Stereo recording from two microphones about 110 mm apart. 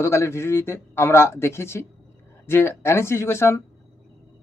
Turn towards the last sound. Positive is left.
turn(degrees=25)  # may be behind; listen again after turning